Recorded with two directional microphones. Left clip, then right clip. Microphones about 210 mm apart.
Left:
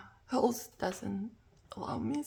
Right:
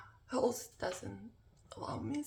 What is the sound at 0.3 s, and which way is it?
Speech, 40° left (ahead or behind).